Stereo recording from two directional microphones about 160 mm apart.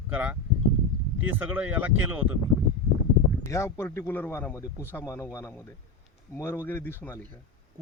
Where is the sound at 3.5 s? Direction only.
15° left (ahead or behind).